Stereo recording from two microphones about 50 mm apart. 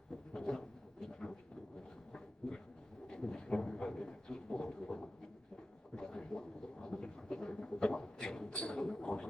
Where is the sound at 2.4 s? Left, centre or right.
Centre.